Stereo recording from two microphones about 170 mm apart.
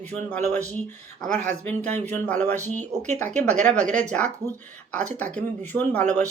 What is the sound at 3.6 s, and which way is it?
Speech, 5° left (ahead or behind).